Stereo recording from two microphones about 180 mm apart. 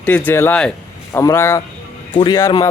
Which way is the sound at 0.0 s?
10° left (ahead or behind).